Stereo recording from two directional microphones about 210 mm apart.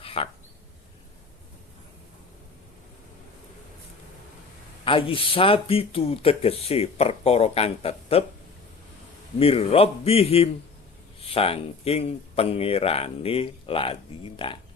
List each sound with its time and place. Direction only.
0.0 s a sound: 25° left (ahead or behind)
4.9 s speech: 25° left (ahead or behind)
9.4 s speech: 30° left (ahead or behind)